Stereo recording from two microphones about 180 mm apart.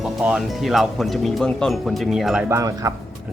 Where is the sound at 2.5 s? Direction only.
20° right (ahead or behind).